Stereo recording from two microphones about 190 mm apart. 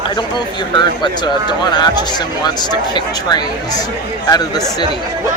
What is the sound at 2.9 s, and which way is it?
Speech, 20° left (ahead or behind).